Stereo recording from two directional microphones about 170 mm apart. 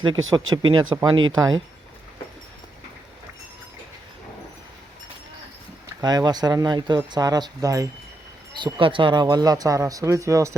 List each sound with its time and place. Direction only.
0.0 s speech: 25° right (ahead or behind)
6.0 s speech: 20° right (ahead or behind)